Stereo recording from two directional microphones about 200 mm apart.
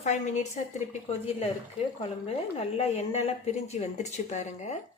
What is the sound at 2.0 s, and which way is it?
A woman's voice, 30° left (ahead or behind).